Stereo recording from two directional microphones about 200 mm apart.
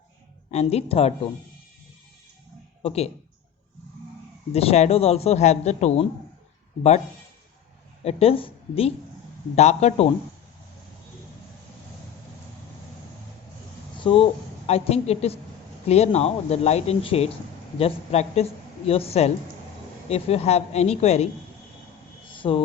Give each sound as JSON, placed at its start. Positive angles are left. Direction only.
{"t": 0.5, "sound": "speech", "side_deg": 30}
{"t": 2.8, "sound": "speech", "side_deg": 30}
{"t": 4.5, "sound": "speech", "side_deg": 30}
{"t": 8.0, "sound": "speech", "side_deg": 30}
{"t": 14.0, "sound": "speech", "side_deg": 25}
{"t": 22.3, "sound": "a sound", "side_deg": 25}